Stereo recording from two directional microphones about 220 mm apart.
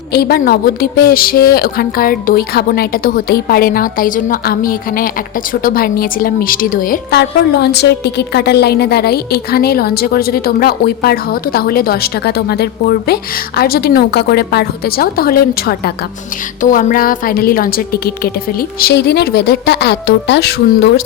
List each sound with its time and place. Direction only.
0.1 s a woman's voice: 45° left (ahead or behind)